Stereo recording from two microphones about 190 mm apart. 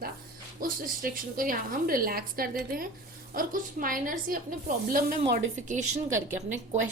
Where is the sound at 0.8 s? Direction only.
50° right (ahead or behind).